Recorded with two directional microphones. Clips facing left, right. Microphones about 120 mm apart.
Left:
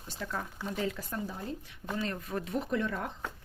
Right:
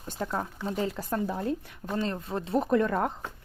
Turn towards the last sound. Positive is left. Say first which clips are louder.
# right 8 dB
turn(degrees=-50)  # may be behind; listen again after turning